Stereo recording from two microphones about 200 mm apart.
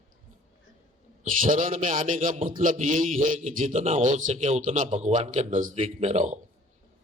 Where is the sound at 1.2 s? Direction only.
40° right (ahead or behind).